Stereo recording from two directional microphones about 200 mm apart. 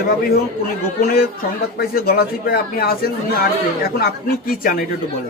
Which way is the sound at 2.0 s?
50° left (ahead or behind).